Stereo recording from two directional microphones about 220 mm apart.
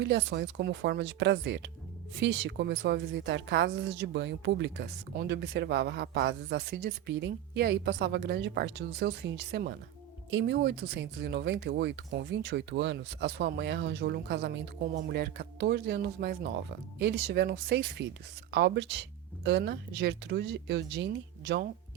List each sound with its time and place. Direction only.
0.0 s speech: 50° right (ahead or behind)